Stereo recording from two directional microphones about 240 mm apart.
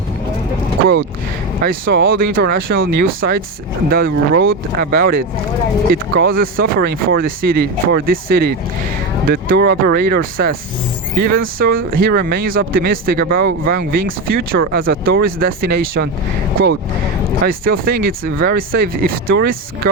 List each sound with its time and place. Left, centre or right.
1.6 s speech: right
17.4 s speech: right